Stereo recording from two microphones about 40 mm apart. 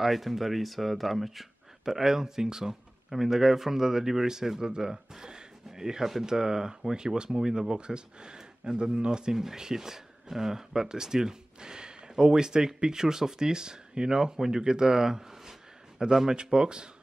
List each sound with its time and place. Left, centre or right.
0.0 s speech: centre; by 16.9 s right